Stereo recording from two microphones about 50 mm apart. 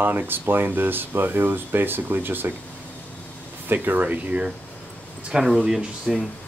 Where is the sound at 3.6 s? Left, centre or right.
Right.